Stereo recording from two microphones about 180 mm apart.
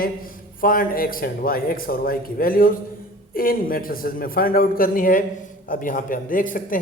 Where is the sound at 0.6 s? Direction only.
50° left (ahead or behind).